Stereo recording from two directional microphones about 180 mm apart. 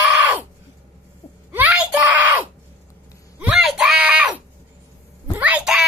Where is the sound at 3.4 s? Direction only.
Centre (ahead or behind).